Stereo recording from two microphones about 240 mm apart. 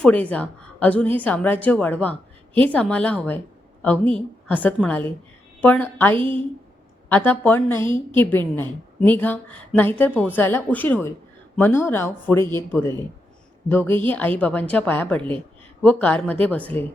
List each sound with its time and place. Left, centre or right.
0.0 s a woman's voice: centre
6.1 s a woman's voice: right
7.1 s a woman's voice: centre